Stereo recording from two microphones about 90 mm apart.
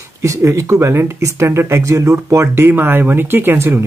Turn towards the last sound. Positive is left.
turn(degrees=-25)  # may be behind; listen again after turning